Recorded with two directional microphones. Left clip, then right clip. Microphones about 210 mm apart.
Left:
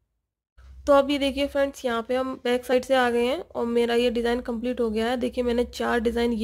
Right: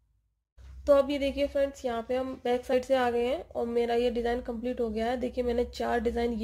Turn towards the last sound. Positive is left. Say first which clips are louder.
# left 5 dB
turn(degrees=30)  # may be behind; listen again after turning